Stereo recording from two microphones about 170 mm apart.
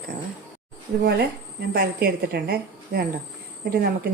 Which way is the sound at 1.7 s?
65° right (ahead or behind).